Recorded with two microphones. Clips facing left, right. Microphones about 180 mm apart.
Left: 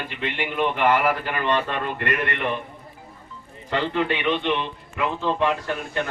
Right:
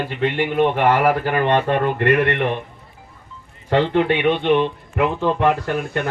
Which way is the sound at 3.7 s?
55° right (ahead or behind).